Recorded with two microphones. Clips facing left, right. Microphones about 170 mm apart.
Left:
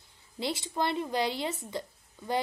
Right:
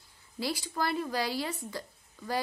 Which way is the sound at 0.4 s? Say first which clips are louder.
Left 1 dB; 25° left (ahead or behind).